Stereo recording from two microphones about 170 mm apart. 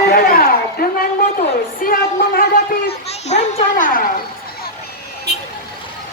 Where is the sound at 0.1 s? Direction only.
60° left (ahead or behind).